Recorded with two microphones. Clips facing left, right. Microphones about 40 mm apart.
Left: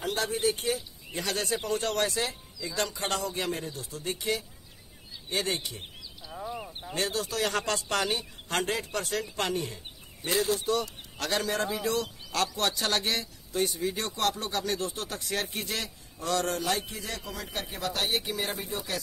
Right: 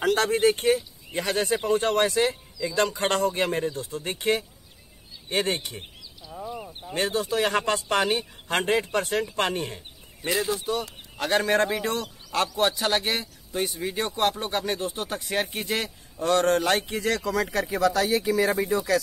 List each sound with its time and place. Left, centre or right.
0.0 s speech: right
1.2 s speech: right
6.9 s a man's voice: right
10.6 s speech: centre
11.1 s a man's voice: right
11.4 s a man's voice: right
12.4 s a man's voice: centre; by 17.6 s right